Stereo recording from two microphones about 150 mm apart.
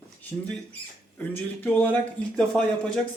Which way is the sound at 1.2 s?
10° left (ahead or behind).